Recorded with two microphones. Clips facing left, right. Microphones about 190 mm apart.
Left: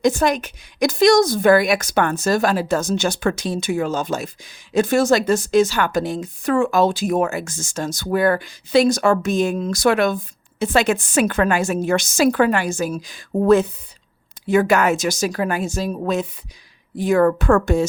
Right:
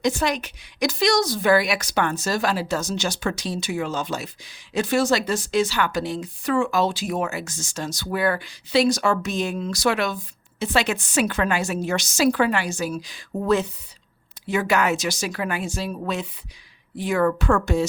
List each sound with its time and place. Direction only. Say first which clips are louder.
0.0 s a woman's voice: left 5 dB; 50° left (ahead or behind)